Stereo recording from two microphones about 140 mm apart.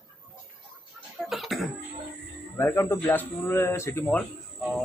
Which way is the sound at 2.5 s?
20° left (ahead or behind).